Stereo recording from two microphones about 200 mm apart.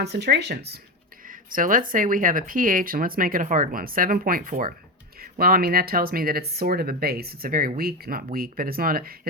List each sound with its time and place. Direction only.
0.0 s speech: 55° right (ahead or behind)
1.3 s speech: 45° right (ahead or behind)